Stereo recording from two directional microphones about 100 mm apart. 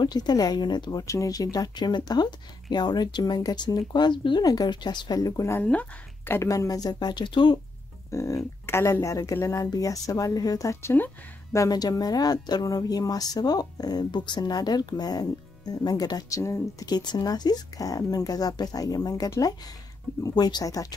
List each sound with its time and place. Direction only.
0.0 s speech: 45° left (ahead or behind)
1.0 s a woman's voice: 35° left (ahead or behind)
5.6 s speech: 15° left (ahead or behind)
6.5 s speech: 35° left (ahead or behind); by 7.5 s 50° left (ahead or behind)
8.1 s a woman's voice: 30° left (ahead or behind)
16.8 s a woman's voice: 45° left (ahead or behind)